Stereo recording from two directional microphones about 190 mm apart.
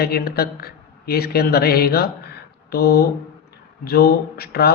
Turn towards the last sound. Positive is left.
turn(degrees=55)  # may be behind; listen again after turning